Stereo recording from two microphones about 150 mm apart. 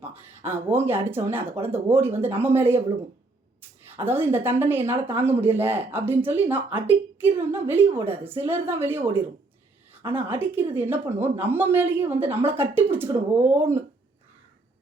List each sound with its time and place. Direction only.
0.0 s speech: 15° right (ahead or behind)
3.8 s speech: 15° right (ahead or behind)